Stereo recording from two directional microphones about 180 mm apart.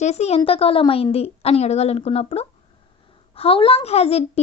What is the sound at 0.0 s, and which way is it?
A woman's voice, 35° left (ahead or behind).